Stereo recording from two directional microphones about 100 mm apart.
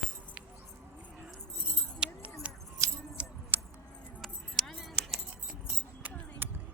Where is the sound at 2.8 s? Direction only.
35° right (ahead or behind).